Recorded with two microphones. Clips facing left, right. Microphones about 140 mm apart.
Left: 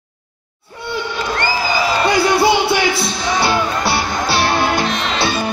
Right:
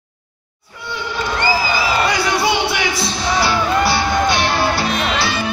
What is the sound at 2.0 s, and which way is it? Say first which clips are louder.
Music: left 4 dB; 30° left (ahead or behind).